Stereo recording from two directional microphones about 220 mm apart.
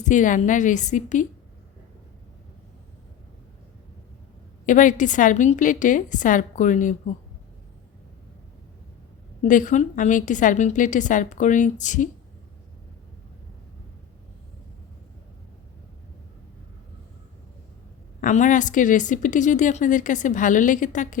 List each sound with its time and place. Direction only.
0.0 s a woman's voice: 35° left (ahead or behind)
4.6 s a woman's voice: 35° left (ahead or behind)
9.4 s a woman's voice: 35° left (ahead or behind)
18.2 s a woman's voice: 35° left (ahead or behind)